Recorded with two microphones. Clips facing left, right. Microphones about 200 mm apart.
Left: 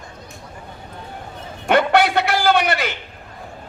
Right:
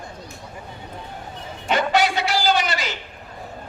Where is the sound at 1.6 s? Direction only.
60° left (ahead or behind).